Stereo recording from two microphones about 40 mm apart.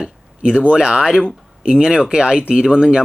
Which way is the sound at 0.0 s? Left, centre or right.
Centre.